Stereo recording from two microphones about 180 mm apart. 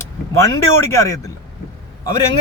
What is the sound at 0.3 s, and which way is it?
Speech, 15° left (ahead or behind).